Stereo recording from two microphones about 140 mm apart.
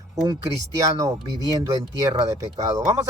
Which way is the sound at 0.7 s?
25° right (ahead or behind).